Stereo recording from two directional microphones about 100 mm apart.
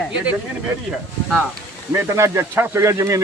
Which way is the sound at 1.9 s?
30° right (ahead or behind).